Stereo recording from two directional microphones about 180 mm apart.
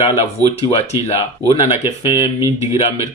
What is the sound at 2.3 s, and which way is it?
Speech, 15° right (ahead or behind).